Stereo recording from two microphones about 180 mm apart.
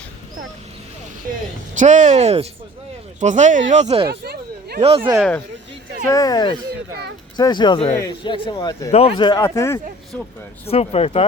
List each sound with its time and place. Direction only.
1.8 s speech: 40° right (ahead or behind)
4.0 s a sound: 65° right (ahead or behind)
4.8 s speech: 35° right (ahead or behind)
6.1 s speech: 20° left (ahead or behind)
8.9 s speech: 35° left (ahead or behind); by 9.8 s 15° left (ahead or behind)
10.7 s speech: 35° left (ahead or behind)